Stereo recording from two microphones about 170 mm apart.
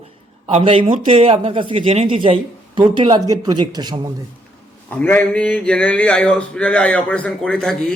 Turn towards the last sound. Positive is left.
turn(degrees=5)  # may be behind; listen again after turning